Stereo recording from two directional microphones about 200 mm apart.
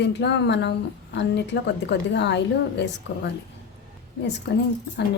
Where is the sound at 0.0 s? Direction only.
60° left (ahead or behind).